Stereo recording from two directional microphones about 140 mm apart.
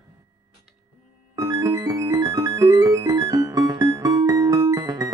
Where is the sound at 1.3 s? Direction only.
25° right (ahead or behind).